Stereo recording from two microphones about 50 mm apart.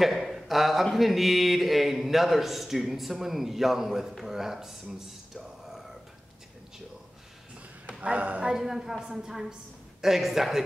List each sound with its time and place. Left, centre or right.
0.0 s a man's voice: centre
4.2 s a sound: centre
8.0 s speech: right
8.5 s a woman's voice: centre